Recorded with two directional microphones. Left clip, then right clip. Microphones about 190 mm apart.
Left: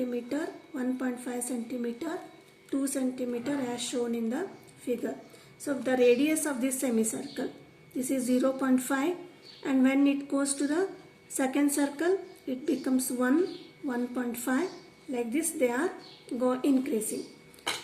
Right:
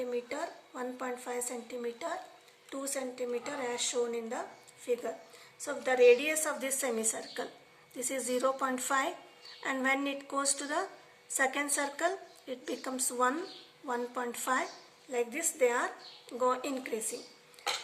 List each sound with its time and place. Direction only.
0.1 s a woman's voice: 25° right (ahead or behind)